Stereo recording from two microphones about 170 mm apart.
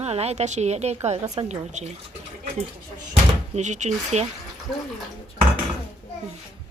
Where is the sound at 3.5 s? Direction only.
45° right (ahead or behind).